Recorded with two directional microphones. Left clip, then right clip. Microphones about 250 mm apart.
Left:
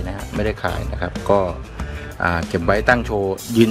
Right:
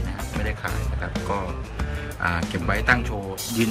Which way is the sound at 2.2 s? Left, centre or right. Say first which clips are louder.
Left 6 dB; left.